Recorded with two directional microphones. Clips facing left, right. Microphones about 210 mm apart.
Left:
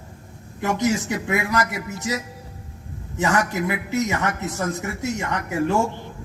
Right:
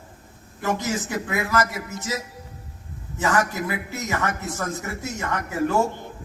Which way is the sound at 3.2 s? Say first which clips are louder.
Left 1 dB; 20° left (ahead or behind).